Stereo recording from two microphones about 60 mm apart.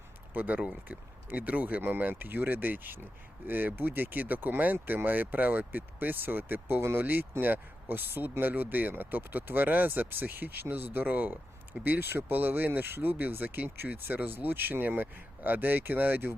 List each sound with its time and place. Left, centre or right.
0.3 s speech: right